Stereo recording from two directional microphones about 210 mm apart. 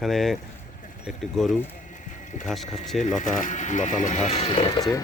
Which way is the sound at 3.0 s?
35° left (ahead or behind).